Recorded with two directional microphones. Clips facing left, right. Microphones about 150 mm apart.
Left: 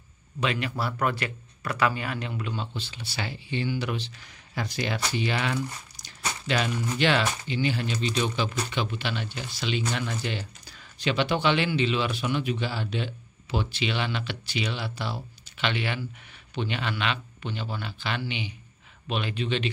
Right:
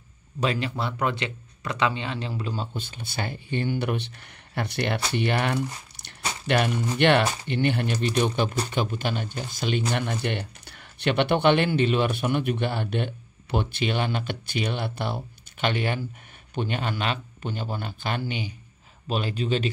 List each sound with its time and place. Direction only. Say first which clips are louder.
0.4 s speech: right 2 dB; 35° right (ahead or behind); by 8.5 s 55° right (ahead or behind)
8.5 s speech: right 3 dB; 40° right (ahead or behind)